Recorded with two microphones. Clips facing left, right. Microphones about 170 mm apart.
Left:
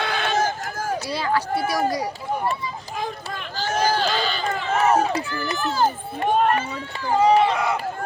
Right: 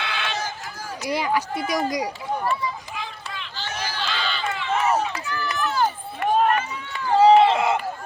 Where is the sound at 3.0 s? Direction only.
45° left (ahead or behind); by 5.9 s 30° left (ahead or behind).